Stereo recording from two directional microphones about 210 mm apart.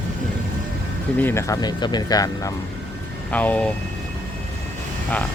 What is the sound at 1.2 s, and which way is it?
Speech, 15° left (ahead or behind).